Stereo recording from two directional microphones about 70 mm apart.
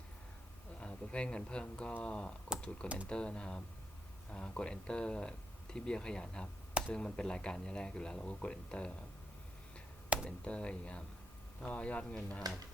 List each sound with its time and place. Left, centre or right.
0.8 s speech: centre
10.2 s speech: centre